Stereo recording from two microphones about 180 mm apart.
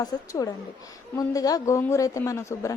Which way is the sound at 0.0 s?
20° left (ahead or behind).